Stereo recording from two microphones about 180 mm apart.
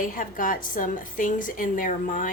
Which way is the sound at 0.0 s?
50° left (ahead or behind).